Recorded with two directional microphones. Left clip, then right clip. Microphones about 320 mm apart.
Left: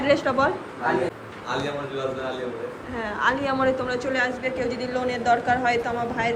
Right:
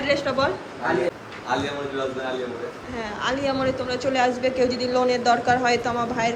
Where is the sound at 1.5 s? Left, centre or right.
Centre.